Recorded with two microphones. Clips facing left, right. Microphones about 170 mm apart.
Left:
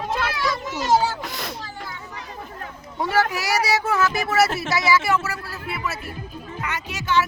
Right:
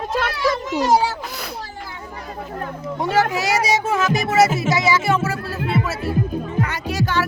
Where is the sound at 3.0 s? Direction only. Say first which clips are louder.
Right 3 dB; 20° right (ahead or behind).